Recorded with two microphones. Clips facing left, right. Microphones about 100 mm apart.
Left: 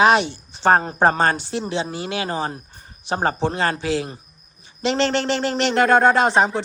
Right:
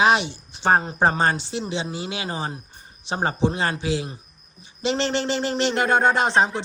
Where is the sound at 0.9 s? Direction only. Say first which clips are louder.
Left 3 dB; 45° left (ahead or behind).